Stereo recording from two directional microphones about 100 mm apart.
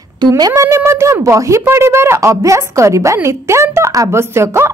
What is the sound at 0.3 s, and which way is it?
A woman's voice, 30° right (ahead or behind).